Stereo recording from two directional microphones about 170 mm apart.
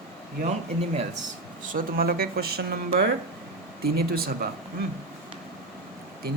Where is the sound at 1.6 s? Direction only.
55° right (ahead or behind).